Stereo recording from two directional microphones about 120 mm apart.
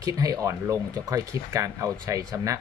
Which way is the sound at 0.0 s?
30° right (ahead or behind).